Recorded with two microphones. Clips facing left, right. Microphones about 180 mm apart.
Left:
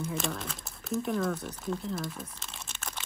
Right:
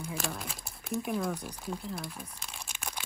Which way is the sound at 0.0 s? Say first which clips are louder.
Left 3 dB; centre (ahead or behind).